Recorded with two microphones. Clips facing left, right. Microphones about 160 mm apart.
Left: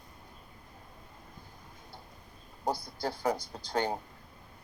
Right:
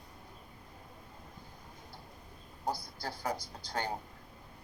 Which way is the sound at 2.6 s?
60° left (ahead or behind).